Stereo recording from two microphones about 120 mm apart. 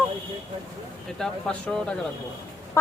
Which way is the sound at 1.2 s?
5° left (ahead or behind).